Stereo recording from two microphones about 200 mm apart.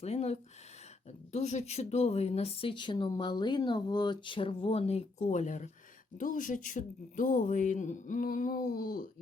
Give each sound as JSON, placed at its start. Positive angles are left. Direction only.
{"t": 0.0, "sound": "speech", "side_deg": 35}